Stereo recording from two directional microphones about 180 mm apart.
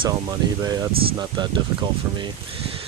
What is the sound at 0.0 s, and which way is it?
Speech, 20° right (ahead or behind).